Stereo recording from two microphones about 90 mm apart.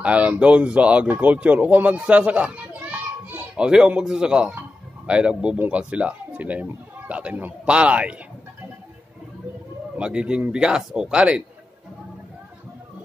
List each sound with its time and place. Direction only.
0.0 s speech: 15° right (ahead or behind)
9.9 s speech: 10° right (ahead or behind)